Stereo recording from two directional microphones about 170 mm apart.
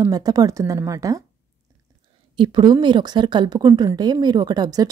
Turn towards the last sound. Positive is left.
turn(degrees=-25)  # may be behind; listen again after turning